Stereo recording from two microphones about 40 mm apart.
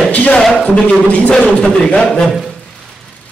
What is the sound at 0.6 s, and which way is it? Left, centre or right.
A man's voice, left.